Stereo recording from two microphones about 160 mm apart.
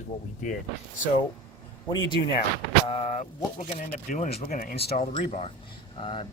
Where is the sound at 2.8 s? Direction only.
40° left (ahead or behind).